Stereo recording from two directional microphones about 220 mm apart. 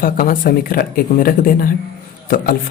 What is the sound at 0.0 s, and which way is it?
Speech, 40° left (ahead or behind).